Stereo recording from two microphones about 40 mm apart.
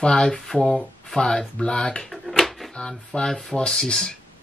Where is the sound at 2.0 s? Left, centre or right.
Centre.